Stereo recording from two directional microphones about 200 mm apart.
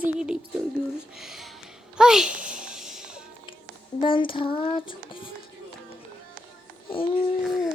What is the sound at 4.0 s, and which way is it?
Child singing, 25° left (ahead or behind).